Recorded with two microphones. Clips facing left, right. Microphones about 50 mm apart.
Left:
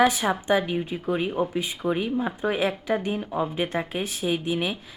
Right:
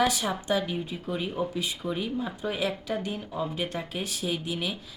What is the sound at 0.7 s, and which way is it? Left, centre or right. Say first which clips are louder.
A woman's voice: left 6 dB; left.